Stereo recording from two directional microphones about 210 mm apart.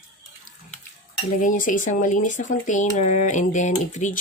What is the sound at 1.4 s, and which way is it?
Speech, 40° left (ahead or behind).